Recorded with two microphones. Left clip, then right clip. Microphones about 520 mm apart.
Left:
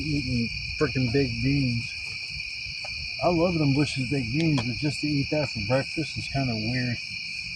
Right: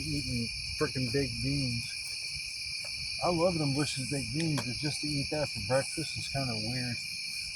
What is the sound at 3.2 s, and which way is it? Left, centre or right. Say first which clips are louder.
Cricket: left 5 dB; centre.